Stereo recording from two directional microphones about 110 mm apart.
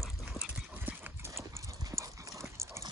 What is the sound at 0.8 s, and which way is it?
Clip-clop, 20° right (ahead or behind).